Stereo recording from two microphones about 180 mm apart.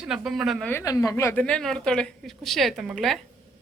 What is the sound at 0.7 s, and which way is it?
A woman's voice, 15° left (ahead or behind).